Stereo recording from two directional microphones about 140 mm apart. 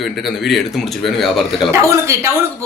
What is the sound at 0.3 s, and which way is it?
Speech, centre (ahead or behind).